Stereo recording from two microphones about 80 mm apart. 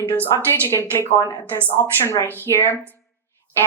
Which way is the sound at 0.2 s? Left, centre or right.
Right.